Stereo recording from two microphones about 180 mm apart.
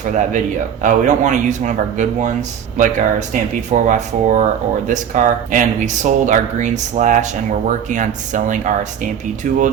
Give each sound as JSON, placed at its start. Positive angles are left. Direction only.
{"t": 0.2, "sound": "speech", "side_deg": -45}